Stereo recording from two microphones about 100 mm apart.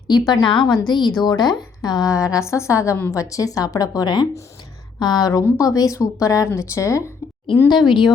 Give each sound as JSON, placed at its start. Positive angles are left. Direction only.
{"t": 0.1, "sound": "a woman's voice", "side_deg": 50}
{"t": 7.9, "sound": "a woman's voice", "side_deg": 50}